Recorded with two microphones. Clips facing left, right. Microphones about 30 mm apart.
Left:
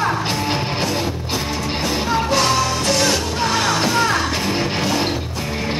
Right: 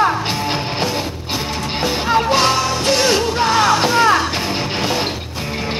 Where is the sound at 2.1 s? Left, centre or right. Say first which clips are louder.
Right 4 dB; right.